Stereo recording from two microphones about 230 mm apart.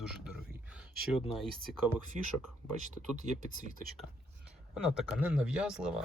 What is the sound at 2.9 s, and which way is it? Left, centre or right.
Speech, right.